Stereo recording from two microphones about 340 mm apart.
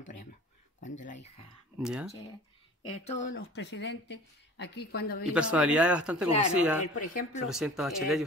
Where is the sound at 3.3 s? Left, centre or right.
Left.